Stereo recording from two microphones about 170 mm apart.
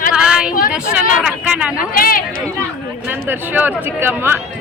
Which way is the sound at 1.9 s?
55° left (ahead or behind).